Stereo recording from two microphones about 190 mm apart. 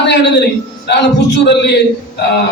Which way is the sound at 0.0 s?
65° left (ahead or behind).